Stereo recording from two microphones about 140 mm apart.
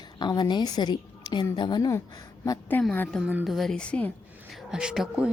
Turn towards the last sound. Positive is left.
turn(degrees=-5)  # may be behind; listen again after turning